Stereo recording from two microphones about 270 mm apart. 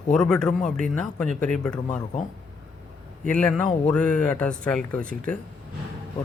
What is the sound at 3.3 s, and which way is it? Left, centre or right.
Speech, centre.